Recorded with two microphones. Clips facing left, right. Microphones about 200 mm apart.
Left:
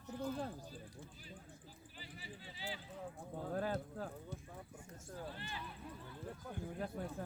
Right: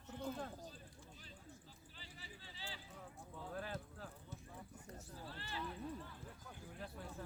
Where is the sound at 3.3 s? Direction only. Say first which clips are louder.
Left 8 dB; 50° left (ahead or behind).